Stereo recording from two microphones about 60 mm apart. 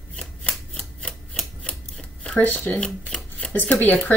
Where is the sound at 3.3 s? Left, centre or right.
Left.